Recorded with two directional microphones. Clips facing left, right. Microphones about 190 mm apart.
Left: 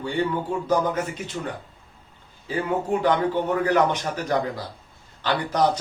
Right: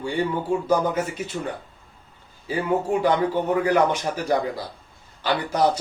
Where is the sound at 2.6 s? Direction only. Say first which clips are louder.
Right 1 dB; 10° right (ahead or behind).